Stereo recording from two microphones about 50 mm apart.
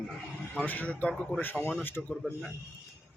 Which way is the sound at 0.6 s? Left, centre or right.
Left.